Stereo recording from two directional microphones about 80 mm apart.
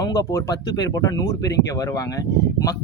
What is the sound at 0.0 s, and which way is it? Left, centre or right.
Speech, left.